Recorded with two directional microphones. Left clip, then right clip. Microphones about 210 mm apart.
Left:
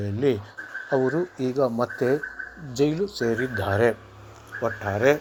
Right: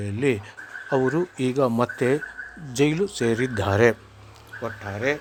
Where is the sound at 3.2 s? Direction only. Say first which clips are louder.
Right 1 dB; 25° right (ahead or behind).